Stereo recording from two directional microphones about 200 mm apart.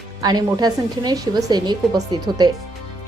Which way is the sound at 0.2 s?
20° right (ahead or behind).